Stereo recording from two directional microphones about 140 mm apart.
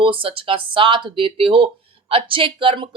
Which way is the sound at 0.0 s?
40° right (ahead or behind).